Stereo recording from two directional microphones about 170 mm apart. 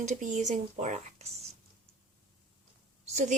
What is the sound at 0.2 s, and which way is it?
Speech, 50° right (ahead or behind).